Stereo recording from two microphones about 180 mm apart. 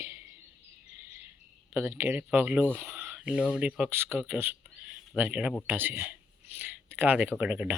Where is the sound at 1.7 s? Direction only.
10° right (ahead or behind).